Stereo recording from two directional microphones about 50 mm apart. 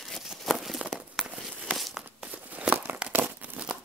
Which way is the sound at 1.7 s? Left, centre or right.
Centre.